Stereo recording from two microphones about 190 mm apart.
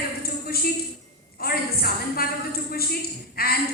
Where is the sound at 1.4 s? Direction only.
50° left (ahead or behind).